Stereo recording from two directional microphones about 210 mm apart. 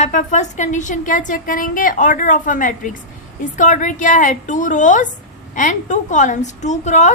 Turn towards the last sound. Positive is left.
turn(degrees=35)  # may be behind; listen again after turning